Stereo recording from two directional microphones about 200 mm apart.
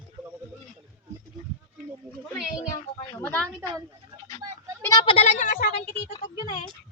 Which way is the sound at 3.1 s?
10° left (ahead or behind).